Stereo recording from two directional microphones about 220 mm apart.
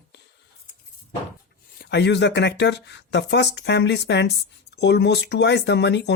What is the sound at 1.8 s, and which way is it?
Speech, 50° left (ahead or behind).